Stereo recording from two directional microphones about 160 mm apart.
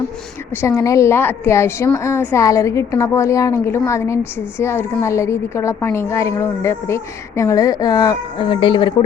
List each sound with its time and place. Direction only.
0.5 s a woman's voice: 15° left (ahead or behind); by 9.0 s 30° left (ahead or behind)